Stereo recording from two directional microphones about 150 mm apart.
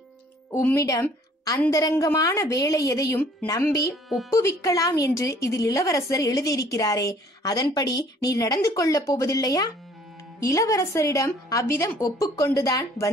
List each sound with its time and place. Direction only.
0.5 s speech: 15° left (ahead or behind)
3.9 s speech: centre (ahead or behind)
4.3 s speech: 20° left (ahead or behind)